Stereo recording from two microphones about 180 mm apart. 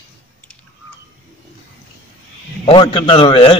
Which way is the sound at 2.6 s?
30° left (ahead or behind).